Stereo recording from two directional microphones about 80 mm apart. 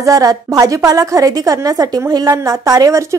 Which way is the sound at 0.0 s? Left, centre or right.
Right.